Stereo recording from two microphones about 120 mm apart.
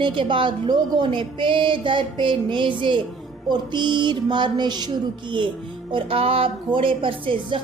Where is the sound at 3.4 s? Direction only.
40° right (ahead or behind).